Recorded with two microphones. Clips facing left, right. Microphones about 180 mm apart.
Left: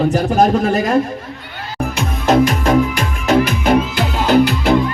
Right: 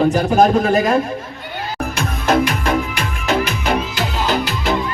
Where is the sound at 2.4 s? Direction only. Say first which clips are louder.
Left 5 dB; 40° left (ahead or behind).